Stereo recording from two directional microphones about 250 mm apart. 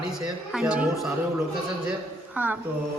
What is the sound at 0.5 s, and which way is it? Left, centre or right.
Speech, centre.